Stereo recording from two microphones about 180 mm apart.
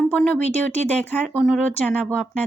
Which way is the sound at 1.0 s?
Centre (ahead or behind).